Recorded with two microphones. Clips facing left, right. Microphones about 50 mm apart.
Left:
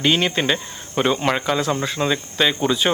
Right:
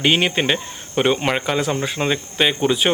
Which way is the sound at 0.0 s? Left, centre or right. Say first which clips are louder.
Right 1 dB; centre.